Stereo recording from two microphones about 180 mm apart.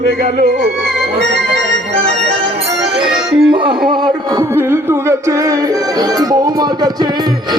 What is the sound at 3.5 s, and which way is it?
Music, 25° right (ahead or behind).